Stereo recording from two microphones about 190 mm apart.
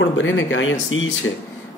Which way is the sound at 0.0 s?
85° left.